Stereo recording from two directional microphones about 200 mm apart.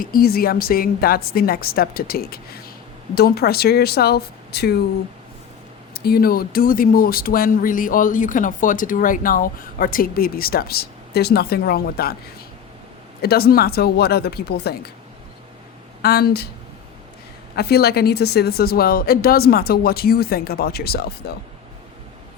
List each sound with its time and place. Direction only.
0.0 s speech: 45° left (ahead or behind)
5.9 s speech: 50° left (ahead or behind)
13.2 s speech: 50° left (ahead or behind)
16.0 s speech: 50° left (ahead or behind)
17.5 s speech: 50° left (ahead or behind)